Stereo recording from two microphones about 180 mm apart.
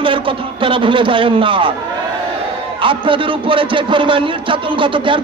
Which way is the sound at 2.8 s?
30° right (ahead or behind).